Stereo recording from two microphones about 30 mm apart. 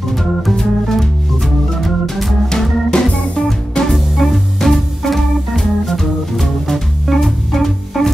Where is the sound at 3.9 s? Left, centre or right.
Centre.